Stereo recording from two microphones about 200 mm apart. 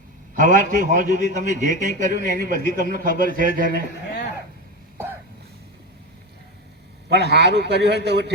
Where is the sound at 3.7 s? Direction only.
60° left (ahead or behind).